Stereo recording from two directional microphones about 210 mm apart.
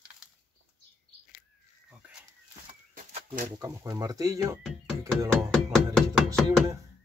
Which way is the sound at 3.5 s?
15° right (ahead or behind).